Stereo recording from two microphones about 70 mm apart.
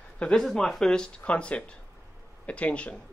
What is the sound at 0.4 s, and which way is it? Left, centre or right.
A man's voice, centre.